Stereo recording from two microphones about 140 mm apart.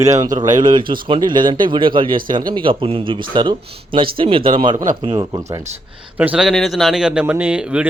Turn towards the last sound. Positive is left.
turn(degrees=-10)  # may be behind; listen again after turning